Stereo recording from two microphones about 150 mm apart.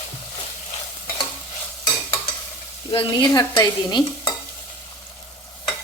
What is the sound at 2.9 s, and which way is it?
Stir, 30° left (ahead or behind).